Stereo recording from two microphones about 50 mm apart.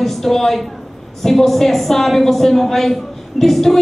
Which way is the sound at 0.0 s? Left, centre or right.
Centre.